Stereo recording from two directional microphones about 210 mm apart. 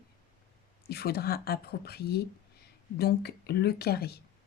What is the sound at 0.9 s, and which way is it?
Speech, 50° left (ahead or behind).